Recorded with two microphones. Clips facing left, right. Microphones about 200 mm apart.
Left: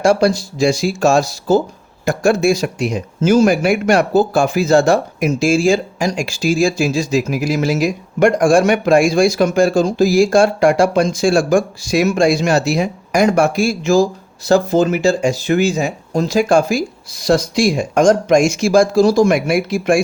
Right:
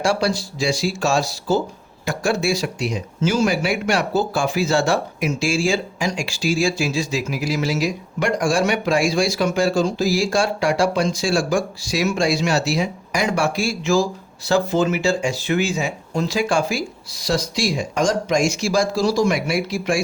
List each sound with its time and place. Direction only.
0.0 s speech: 45° left (ahead or behind)